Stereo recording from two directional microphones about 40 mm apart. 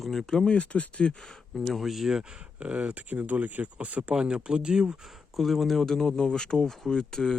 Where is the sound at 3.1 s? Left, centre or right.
Right.